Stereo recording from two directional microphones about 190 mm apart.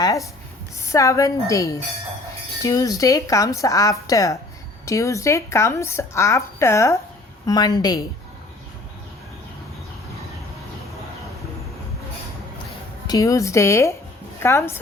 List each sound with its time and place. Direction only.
0.9 s a woman's voice: 15° left (ahead or behind)
13.1 s a woman's voice: 15° left (ahead or behind)